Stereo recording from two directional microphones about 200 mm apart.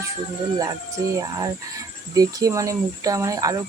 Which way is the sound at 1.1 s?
15° right (ahead or behind).